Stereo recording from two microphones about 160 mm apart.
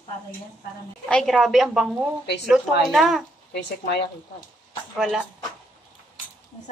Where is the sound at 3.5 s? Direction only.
90° left.